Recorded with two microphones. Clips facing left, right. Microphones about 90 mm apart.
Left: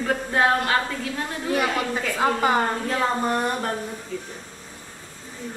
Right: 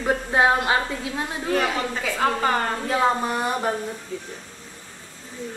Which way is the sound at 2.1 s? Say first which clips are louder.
Left 1 dB; 10° left (ahead or behind).